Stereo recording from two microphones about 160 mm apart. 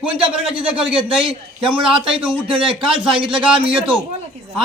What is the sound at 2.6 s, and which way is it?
Speech, 30° right (ahead or behind).